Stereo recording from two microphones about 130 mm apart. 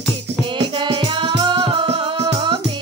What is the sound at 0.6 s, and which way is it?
Music, 40° right (ahead or behind).